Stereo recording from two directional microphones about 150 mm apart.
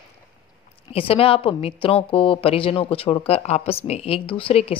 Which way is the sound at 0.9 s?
40° left (ahead or behind).